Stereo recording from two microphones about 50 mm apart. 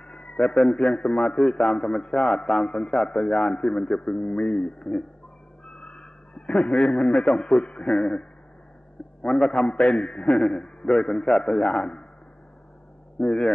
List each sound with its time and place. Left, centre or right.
0.0 s a sound: centre
0.5 s a man's voice: centre; by 3.9 s left
3.9 s a man's voice: centre
5.7 s a sound: left
6.7 s a man's voice: centre
13.2 s a man's voice: centre